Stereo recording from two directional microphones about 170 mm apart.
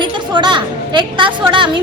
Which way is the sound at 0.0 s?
25° right (ahead or behind).